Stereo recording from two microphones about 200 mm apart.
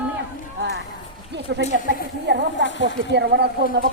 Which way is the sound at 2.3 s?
60° right (ahead or behind).